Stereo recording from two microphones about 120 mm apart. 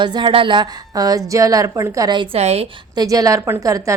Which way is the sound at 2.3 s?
60° right (ahead or behind).